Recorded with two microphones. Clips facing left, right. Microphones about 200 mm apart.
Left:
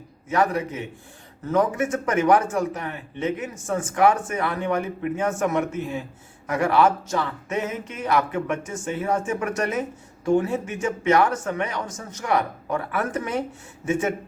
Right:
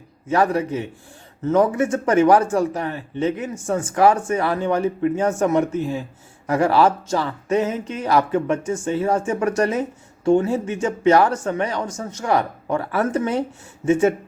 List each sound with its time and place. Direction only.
0.3 s a man's voice: 30° right (ahead or behind)